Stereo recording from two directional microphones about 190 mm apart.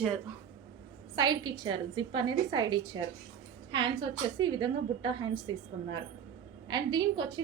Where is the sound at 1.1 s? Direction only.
25° right (ahead or behind).